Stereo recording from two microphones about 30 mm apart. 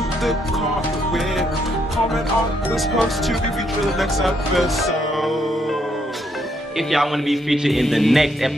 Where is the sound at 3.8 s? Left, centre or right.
Centre.